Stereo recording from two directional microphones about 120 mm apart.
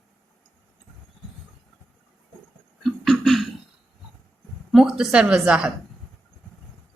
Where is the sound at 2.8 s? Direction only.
Centre (ahead or behind).